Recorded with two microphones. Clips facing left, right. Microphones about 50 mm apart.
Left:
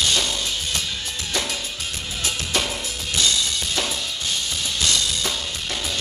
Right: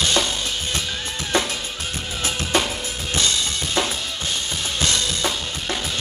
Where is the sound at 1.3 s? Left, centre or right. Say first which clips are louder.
Right 6 dB; right.